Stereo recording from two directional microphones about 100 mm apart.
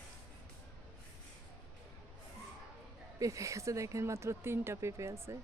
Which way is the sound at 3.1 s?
35° right (ahead or behind).